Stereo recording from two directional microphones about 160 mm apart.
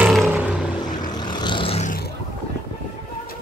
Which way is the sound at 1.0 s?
25° left (ahead or behind).